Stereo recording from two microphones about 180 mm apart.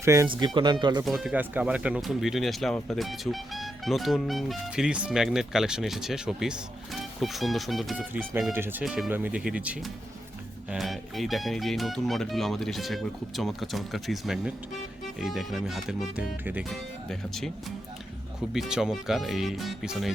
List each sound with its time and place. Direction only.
0.0 s speech: 15° right (ahead or behind)
1.0 s speech: centre (ahead or behind)
18.5 s speech: 5° right (ahead or behind)